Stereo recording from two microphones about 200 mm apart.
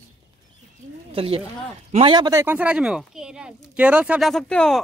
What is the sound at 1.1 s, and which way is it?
Speech, 30° right (ahead or behind).